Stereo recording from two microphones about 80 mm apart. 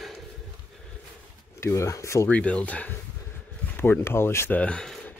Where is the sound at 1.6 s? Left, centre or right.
Left.